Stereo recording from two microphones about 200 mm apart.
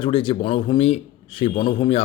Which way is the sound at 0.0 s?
25° left (ahead or behind).